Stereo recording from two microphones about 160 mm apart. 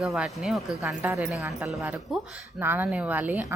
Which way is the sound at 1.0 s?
10° right (ahead or behind).